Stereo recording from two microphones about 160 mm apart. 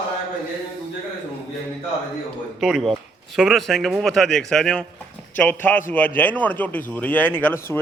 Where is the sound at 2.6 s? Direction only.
Centre (ahead or behind).